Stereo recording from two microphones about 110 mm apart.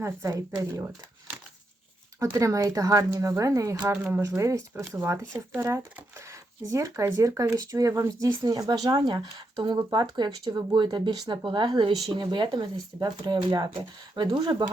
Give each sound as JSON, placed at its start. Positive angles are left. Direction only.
{"t": 0.0, "sound": "speech", "side_deg": -30}
{"t": 2.1, "sound": "speech", "side_deg": -30}